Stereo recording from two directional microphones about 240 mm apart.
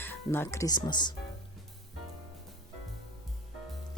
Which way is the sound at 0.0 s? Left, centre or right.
Centre.